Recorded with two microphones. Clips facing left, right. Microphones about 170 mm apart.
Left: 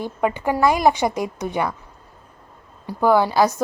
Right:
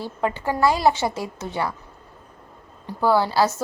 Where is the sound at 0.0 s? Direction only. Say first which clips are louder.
Left 3 dB; 15° left (ahead or behind).